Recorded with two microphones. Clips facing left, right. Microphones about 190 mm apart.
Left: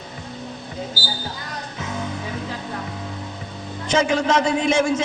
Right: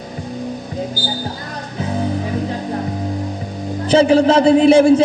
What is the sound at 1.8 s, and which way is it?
Music, 35° right (ahead or behind).